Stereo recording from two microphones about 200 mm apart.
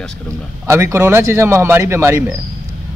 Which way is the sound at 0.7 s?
15° right (ahead or behind).